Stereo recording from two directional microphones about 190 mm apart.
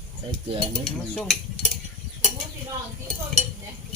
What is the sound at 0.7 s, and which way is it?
Cutlery, 5° left (ahead or behind).